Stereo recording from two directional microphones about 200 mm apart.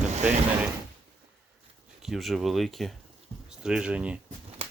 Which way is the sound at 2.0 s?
Centre (ahead or behind).